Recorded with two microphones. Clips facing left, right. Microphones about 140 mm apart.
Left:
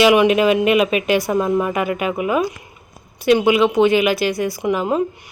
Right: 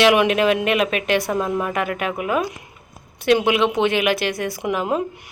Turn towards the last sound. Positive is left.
turn(degrees=0)  # may be behind; listen again after turning